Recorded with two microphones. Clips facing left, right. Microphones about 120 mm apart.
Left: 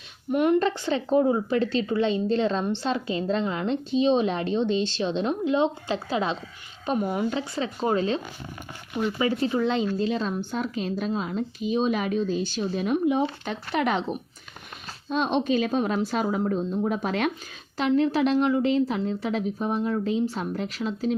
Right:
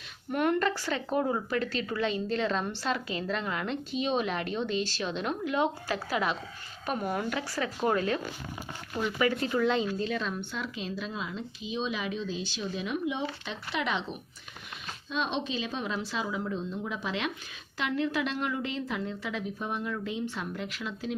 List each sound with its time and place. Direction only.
0.3 s a woman's voice: 20° left (ahead or behind); by 17.3 s 50° left (ahead or behind)
17.7 s a woman's voice: 35° left (ahead or behind)